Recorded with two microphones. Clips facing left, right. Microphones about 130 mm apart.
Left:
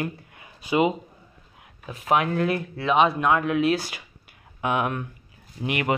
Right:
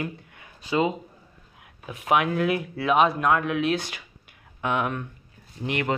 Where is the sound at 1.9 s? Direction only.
Centre (ahead or behind).